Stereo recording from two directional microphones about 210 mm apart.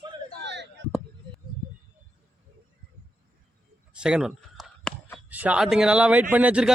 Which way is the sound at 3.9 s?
5° right (ahead or behind).